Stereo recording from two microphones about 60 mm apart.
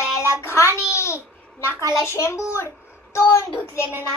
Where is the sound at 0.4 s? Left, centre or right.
Left.